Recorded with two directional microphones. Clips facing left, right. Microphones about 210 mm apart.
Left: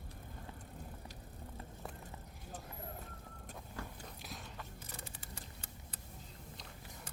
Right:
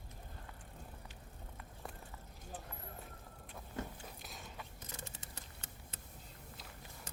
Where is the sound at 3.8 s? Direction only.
20° right (ahead or behind).